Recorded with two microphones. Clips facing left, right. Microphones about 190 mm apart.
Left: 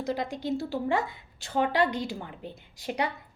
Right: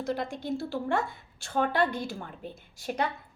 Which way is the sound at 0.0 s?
20° left (ahead or behind).